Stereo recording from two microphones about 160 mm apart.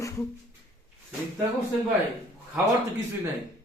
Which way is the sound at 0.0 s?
20° left (ahead or behind).